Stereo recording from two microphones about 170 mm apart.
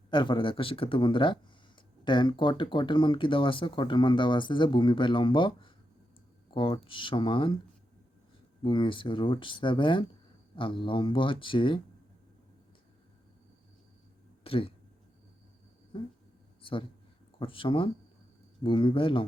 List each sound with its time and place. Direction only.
0.1 s speech: 30° left (ahead or behind)
8.6 s speech: 30° left (ahead or behind)
14.4 s speech: 35° left (ahead or behind)
17.4 s speech: 30° left (ahead or behind)